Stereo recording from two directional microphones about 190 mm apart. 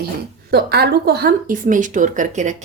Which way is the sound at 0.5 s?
60° right (ahead or behind).